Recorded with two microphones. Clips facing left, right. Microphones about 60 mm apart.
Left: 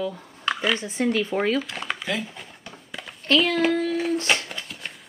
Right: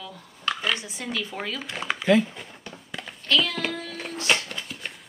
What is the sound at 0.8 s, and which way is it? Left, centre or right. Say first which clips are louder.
Speech: left 8 dB; left.